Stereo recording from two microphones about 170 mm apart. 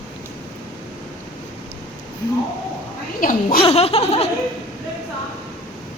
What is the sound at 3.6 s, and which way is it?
Laughter, 35° left (ahead or behind).